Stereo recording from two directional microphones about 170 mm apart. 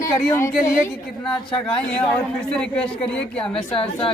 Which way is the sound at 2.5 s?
5° left (ahead or behind).